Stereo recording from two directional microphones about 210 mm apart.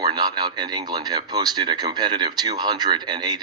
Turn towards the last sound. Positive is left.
turn(degrees=-20)  # may be behind; listen again after turning